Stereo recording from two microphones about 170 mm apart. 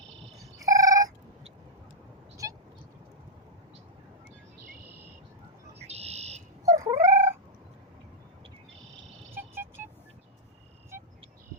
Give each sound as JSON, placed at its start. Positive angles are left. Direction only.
{"t": 0.6, "sound": "telephone bell ringing", "side_deg": -20}
{"t": 2.4, "sound": "vehicle", "side_deg": -20}
{"t": 5.8, "sound": "a sound", "side_deg": -40}
{"t": 6.7, "sound": "dog", "side_deg": -20}
{"t": 9.3, "sound": "vehicle", "side_deg": -15}
{"t": 10.9, "sound": "a sound", "side_deg": -15}